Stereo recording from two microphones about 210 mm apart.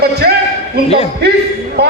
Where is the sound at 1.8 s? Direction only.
50° right (ahead or behind).